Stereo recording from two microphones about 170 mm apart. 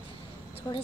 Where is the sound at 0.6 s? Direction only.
20° left (ahead or behind).